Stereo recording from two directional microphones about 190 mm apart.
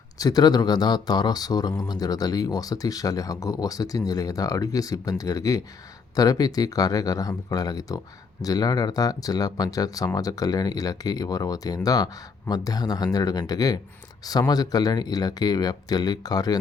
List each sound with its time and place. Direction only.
0.2 s speech: 20° left (ahead or behind)